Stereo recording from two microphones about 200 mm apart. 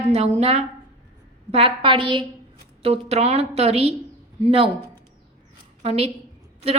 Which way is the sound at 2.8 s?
30° right (ahead or behind).